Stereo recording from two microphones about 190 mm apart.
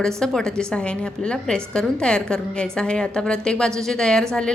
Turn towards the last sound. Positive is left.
turn(degrees=5)  # may be behind; listen again after turning